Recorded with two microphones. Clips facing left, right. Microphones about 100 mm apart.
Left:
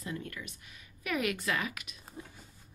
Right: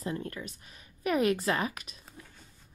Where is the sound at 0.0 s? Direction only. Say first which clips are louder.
Right 5 dB; 35° right (ahead or behind).